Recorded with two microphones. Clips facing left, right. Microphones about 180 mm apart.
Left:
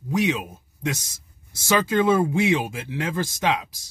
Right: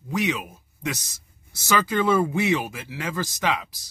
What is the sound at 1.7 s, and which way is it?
Speech, 20° left (ahead or behind).